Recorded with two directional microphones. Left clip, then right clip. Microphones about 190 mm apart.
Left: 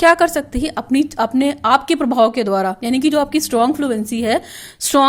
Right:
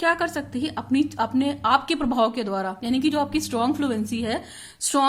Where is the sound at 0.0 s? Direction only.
40° left (ahead or behind).